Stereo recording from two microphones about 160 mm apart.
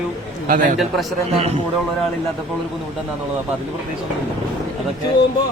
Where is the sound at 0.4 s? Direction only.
55° right (ahead or behind).